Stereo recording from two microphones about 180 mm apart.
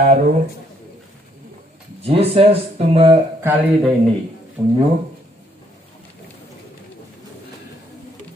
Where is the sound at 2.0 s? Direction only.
30° right (ahead or behind).